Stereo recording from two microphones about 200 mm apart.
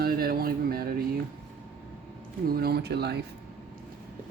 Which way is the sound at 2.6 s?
55° right (ahead or behind).